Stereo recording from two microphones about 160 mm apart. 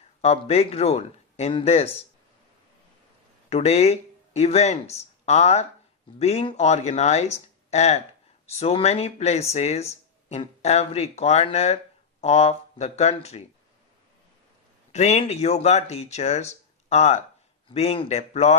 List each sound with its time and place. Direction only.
0.2 s speech: 40° left (ahead or behind)
3.5 s speech: 40° left (ahead or behind)
14.9 s speech: 45° left (ahead or behind)